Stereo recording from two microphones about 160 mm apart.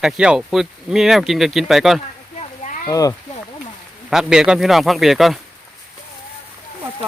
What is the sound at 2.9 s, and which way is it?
Speech, 20° left (ahead or behind).